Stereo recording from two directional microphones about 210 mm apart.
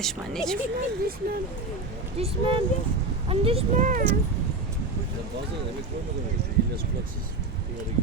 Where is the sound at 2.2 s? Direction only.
30° right (ahead or behind).